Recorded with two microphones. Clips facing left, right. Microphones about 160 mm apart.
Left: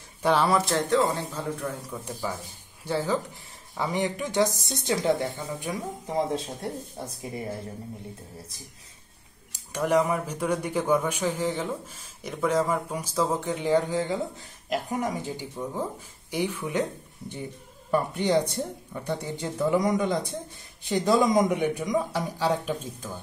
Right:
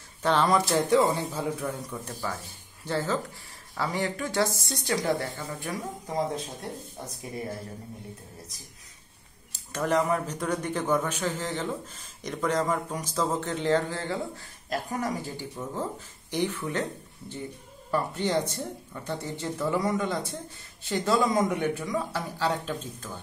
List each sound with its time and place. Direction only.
0.2 s speech: 10° left (ahead or behind)
0.7 s speech: 10° right (ahead or behind)
1.9 s a woman's voice: 15° left (ahead or behind)
9.5 s speech: 10° left (ahead or behind)
17.9 s speech: 15° left (ahead or behind)